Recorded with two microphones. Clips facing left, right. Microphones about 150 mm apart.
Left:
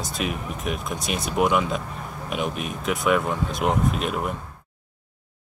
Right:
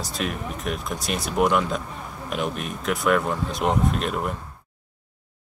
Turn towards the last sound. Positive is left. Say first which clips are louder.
# even
turn(degrees=5)  # may be behind; listen again after turning